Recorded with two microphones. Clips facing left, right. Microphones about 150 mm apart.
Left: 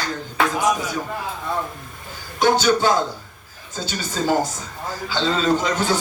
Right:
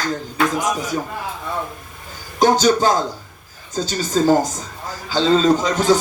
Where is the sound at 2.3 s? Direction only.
40° right (ahead or behind).